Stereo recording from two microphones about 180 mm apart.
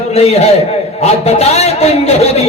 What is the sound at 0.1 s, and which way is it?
A man's voice, 35° left (ahead or behind).